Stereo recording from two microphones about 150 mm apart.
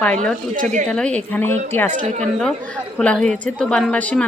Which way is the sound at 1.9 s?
55° right (ahead or behind).